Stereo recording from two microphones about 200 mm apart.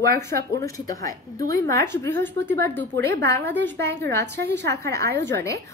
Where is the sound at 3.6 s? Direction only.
60° right (ahead or behind).